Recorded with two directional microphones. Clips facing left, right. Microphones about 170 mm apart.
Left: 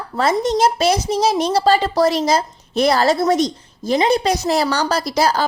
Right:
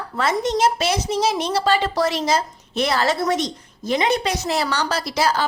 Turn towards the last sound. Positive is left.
turn(degrees=40)  # may be behind; listen again after turning